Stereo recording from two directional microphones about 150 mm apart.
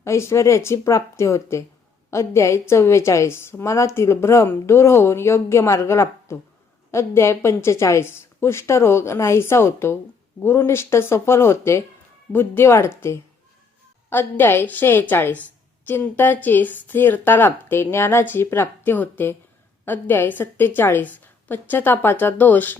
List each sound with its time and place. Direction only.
0.0 s a woman's voice: 20° left (ahead or behind)